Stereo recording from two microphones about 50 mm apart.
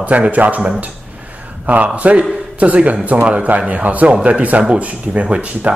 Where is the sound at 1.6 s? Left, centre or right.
Right.